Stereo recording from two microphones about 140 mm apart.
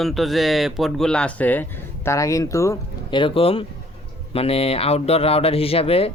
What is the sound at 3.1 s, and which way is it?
Speech, 35° left (ahead or behind).